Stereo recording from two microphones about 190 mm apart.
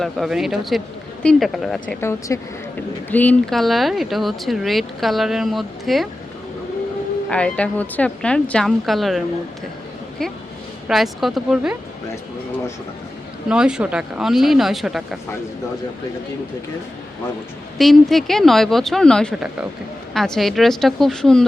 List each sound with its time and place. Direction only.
0.0 s speech: centre (ahead or behind)
2.0 s speech: 15° left (ahead or behind); by 6.1 s centre (ahead or behind)
7.3 s speech: 5° left (ahead or behind)
10.8 s speech: centre (ahead or behind)
13.5 s speech: 5° right (ahead or behind)
17.7 s speech: centre (ahead or behind)